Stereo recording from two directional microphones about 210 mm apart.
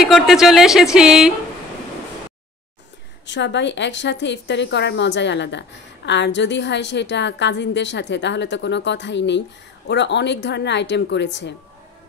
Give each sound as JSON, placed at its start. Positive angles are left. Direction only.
{"t": 0.0, "sound": "speech", "side_deg": 0}
{"t": 3.3, "sound": "a woman's voice", "side_deg": 55}